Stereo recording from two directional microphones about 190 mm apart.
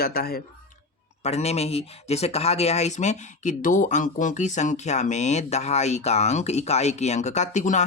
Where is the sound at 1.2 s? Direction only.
35° left (ahead or behind).